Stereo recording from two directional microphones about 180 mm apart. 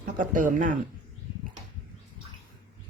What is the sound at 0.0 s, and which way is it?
Speech, 45° right (ahead or behind).